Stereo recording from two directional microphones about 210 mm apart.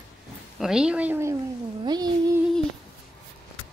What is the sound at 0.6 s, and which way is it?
Speech, 5° right (ahead or behind).